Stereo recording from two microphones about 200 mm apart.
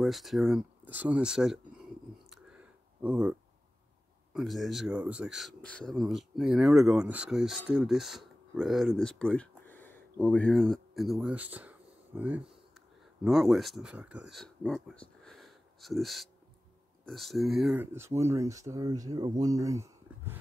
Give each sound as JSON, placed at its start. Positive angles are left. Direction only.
{"t": 0.0, "sound": "speech", "side_deg": 0}
{"t": 2.3, "sound": "a sound", "side_deg": -5}
{"t": 4.3, "sound": "speech", "side_deg": 0}
{"t": 17.9, "sound": "speech", "side_deg": -15}